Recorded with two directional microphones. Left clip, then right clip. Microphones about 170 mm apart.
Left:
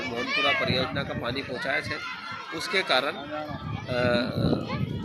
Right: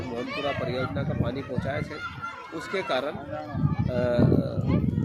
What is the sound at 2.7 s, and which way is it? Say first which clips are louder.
Speech: left 3 dB; 20° right (ahead or behind).